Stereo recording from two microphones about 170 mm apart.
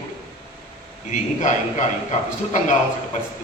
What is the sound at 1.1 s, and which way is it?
Speech, 45° left (ahead or behind).